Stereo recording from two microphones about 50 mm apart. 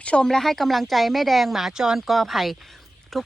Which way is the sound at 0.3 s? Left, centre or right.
Centre.